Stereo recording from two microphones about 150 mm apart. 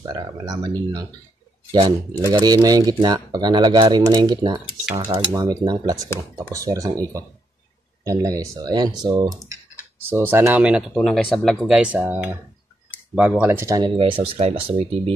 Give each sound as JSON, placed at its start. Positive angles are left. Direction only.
{"t": 0.0, "sound": "speech", "side_deg": -25}
{"t": 4.9, "sound": "speech", "side_deg": -15}
{"t": 10.0, "sound": "speech", "side_deg": -15}
{"t": 13.9, "sound": "speech", "side_deg": -35}